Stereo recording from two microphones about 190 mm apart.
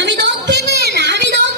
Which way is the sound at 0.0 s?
65° right (ahead or behind).